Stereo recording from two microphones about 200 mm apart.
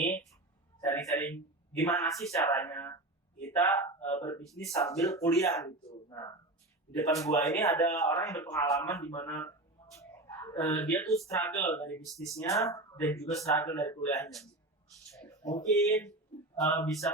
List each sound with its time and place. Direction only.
0.8 s speech: 15° left (ahead or behind)
4.4 s speech: centre (ahead or behind)
4.7 s speech: 15° left (ahead or behind)
9.9 s a sound: 15° left (ahead or behind)
11.3 s speech: 15° left (ahead or behind)
12.0 s speech: centre (ahead or behind)
12.4 s speech: 15° left (ahead or behind)
15.3 s a sound: 15° left (ahead or behind)
15.9 s speech: 15° left (ahead or behind)